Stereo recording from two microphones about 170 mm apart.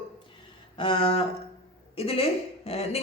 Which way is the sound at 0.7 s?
30° left (ahead or behind).